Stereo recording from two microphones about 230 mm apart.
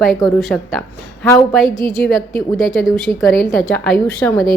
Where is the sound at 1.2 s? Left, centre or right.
Centre.